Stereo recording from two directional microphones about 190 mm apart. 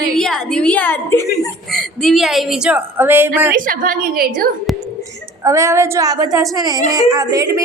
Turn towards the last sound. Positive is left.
turn(degrees=-20)  # may be behind; listen again after turning